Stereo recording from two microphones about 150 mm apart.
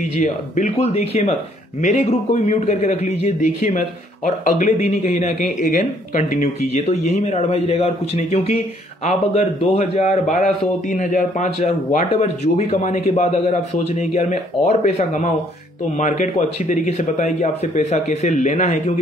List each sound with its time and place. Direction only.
0.0 s a man's voice: 50° left (ahead or behind)
9.0 s a man's voice: 45° left (ahead or behind)